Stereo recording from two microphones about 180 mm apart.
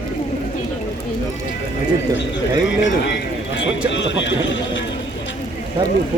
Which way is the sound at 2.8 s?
85° left.